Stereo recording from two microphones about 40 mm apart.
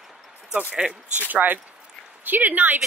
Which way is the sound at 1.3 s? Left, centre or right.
Right.